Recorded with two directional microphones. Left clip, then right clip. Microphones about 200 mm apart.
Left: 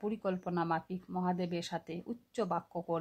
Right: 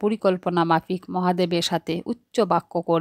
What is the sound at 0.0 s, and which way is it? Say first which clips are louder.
Speech: right 15 dB; 45° right (ahead or behind).